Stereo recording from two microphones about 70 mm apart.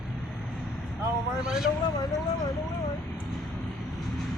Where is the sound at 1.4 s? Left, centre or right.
Centre.